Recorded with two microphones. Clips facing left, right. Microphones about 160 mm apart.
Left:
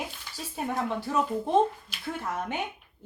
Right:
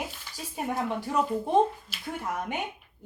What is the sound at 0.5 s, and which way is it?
Speech, 15° right (ahead or behind).